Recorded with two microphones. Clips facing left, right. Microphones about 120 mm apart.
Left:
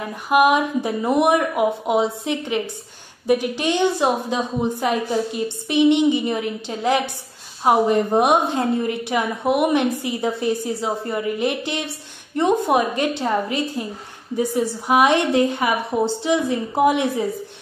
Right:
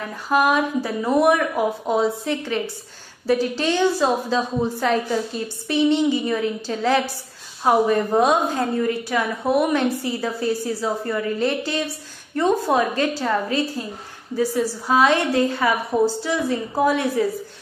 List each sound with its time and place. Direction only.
0.3 s a woman's voice: 15° left (ahead or behind)